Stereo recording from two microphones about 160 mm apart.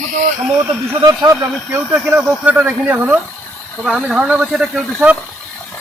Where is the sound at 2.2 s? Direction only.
5° right (ahead or behind).